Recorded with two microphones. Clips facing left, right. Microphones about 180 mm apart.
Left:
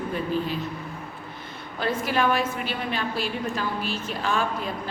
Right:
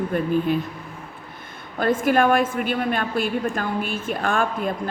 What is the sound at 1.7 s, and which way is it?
A woman's voice, 50° right (ahead or behind).